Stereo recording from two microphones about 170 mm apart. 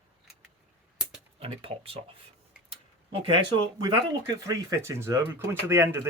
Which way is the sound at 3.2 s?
25° right (ahead or behind).